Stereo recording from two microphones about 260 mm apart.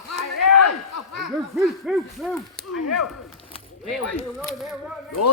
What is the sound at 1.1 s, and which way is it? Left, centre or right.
Speech, centre.